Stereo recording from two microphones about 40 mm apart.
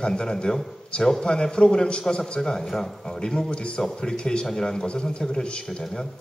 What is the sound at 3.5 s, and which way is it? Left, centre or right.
A man's voice, left.